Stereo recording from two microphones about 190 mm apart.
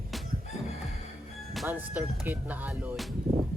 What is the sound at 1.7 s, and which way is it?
Speech, 10° right (ahead or behind).